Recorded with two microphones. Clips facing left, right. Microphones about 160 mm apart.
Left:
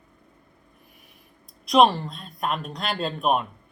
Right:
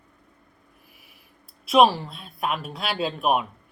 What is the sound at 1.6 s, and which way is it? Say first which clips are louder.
Speech: even; 5° right (ahead or behind).